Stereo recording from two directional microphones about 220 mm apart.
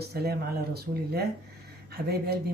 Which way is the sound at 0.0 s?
45° right (ahead or behind).